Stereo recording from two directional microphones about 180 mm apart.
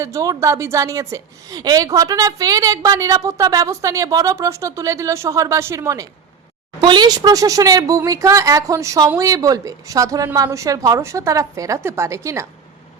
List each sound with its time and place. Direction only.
0.0 s a woman's voice: 20° right (ahead or behind)